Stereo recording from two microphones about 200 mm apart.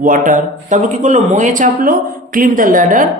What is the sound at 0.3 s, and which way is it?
Speech, 40° right (ahead or behind).